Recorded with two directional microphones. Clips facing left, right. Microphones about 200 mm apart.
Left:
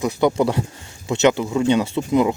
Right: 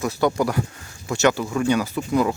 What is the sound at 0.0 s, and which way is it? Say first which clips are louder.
Speech: left 3 dB; 20° left (ahead or behind).